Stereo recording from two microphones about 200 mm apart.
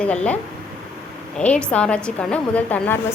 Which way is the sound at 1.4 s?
5° left (ahead or behind).